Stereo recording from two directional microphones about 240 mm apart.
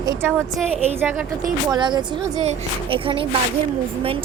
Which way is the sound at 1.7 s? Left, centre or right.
Centre.